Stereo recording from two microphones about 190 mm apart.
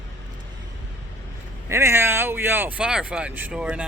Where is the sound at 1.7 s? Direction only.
15° right (ahead or behind).